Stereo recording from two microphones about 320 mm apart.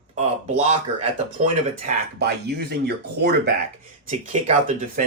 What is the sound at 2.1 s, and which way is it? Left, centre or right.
Speech, right.